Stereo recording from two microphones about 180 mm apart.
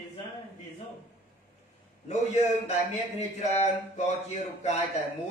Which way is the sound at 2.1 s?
40° left (ahead or behind).